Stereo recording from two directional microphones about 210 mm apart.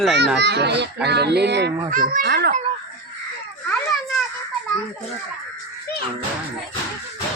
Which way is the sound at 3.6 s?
Centre (ahead or behind).